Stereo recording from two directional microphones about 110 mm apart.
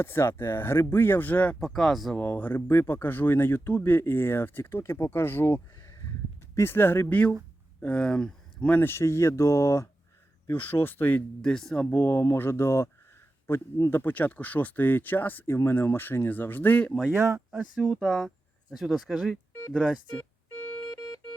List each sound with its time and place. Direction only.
0.0 s speech: 20° left (ahead or behind)
1.5 s speech: 5° left (ahead or behind)
2.1 s speech: 15° left (ahead or behind)
17.1 s speech: 25° right (ahead or behind)
17.5 s speech: centre (ahead or behind)
20.1 s organ: 15° left (ahead or behind)